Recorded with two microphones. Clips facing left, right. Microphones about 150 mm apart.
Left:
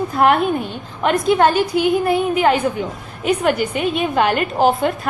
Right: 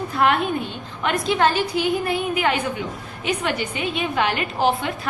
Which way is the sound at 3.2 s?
45° left (ahead or behind).